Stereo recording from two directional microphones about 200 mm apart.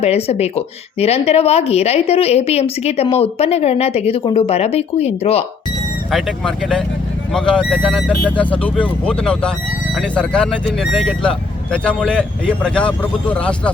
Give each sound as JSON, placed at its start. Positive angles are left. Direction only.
{"t": 0.0, "sound": "speech", "side_deg": 30}
{"t": 6.1, "sound": "speech", "side_deg": 0}